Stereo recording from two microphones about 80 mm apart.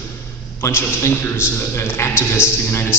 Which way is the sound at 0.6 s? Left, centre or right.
Left.